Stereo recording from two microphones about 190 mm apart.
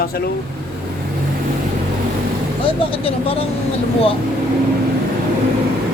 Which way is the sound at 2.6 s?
30° left (ahead or behind).